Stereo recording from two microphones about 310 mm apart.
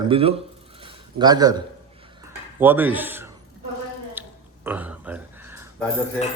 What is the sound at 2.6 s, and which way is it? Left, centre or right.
Speech, centre.